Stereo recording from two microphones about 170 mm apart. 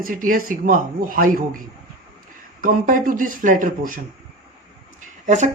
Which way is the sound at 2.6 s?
55° right (ahead or behind).